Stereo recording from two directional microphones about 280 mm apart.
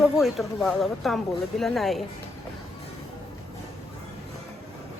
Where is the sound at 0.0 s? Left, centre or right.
Centre.